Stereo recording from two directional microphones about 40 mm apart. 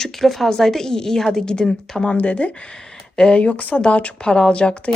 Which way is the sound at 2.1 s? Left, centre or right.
Left.